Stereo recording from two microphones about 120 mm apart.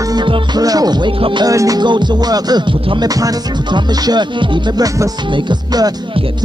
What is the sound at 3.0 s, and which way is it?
Music, 30° right (ahead or behind).